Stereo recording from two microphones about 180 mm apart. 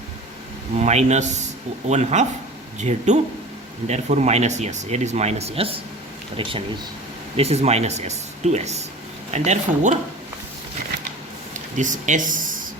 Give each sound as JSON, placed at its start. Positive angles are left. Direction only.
{"t": 0.8, "sound": "speech", "side_deg": -40}
{"t": 11.5, "sound": "speech", "side_deg": -45}